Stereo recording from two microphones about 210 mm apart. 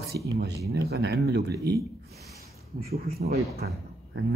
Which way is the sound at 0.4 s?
50° right (ahead or behind).